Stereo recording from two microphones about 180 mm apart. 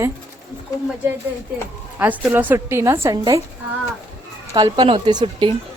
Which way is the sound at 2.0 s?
10° right (ahead or behind).